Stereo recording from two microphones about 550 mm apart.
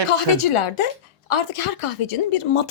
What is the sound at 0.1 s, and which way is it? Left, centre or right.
Speech, left.